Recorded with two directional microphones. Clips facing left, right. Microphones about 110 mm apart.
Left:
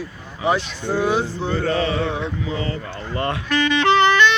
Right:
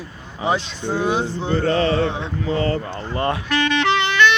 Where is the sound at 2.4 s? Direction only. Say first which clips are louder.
Right 5 dB; 45° right (ahead or behind).